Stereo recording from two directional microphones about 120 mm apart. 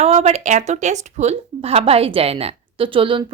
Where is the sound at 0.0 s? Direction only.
65° right (ahead or behind).